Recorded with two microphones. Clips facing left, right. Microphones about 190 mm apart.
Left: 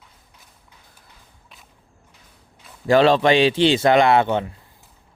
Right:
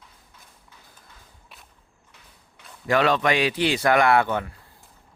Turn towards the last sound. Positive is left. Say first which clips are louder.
# left 3 dB
turn(degrees=25)  # may be behind; listen again after turning